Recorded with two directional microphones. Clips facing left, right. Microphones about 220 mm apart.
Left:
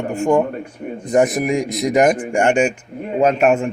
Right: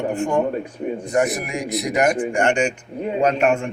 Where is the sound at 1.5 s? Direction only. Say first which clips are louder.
Left 5 dB; 90° left.